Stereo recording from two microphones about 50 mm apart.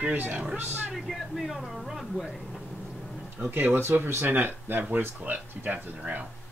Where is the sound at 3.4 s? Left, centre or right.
Right.